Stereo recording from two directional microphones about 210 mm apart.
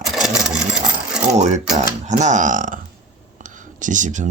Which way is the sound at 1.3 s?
35° right (ahead or behind).